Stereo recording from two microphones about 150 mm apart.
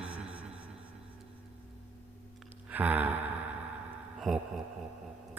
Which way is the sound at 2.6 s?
10° right (ahead or behind).